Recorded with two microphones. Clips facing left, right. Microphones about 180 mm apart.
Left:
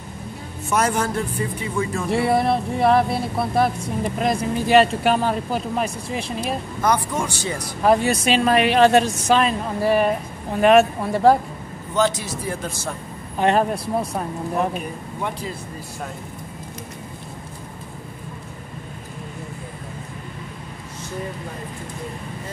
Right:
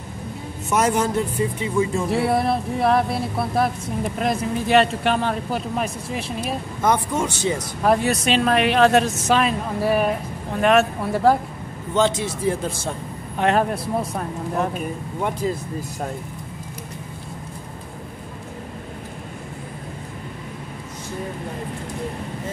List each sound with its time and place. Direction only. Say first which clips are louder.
0.7 s a man's voice: right 1 dB; 20° right (ahead or behind)
2.0 s speech: left 1 dB; centre (ahead or behind)
6.8 s a man's voice: right 1 dB; 20° right (ahead or behind)
7.8 s speech: left 2 dB; centre (ahead or behind)
11.9 s a man's voice: right 1 dB; 25° right (ahead or behind)
13.4 s speech: left 1 dB; centre (ahead or behind)